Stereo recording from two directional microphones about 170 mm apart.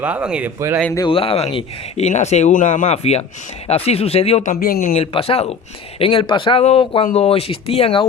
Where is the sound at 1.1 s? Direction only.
35° left (ahead or behind).